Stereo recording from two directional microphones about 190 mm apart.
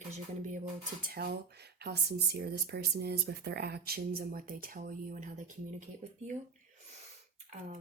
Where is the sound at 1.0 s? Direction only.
55° right (ahead or behind).